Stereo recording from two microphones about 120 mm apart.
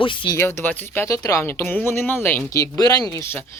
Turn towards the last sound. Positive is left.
turn(degrees=30)  # may be behind; listen again after turning